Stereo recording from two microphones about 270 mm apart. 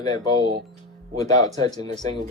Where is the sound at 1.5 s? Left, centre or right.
Centre.